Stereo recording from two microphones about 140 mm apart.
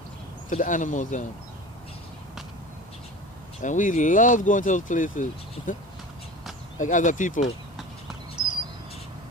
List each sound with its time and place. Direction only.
0.5 s speech: 65° left (ahead or behind)
3.6 s speech: 65° left (ahead or behind)
6.7 s speech: 65° left (ahead or behind)
8.4 s a sound: 35° right (ahead or behind)